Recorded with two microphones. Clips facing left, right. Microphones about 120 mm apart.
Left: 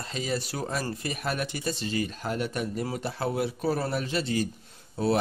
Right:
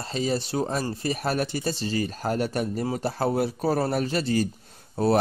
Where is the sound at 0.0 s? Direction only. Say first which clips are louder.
Right 4 dB; 30° right (ahead or behind).